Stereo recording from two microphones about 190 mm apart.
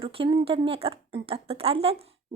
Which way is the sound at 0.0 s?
30° right (ahead or behind).